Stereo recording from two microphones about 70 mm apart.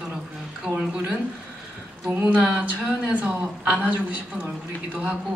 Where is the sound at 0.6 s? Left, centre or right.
Centre.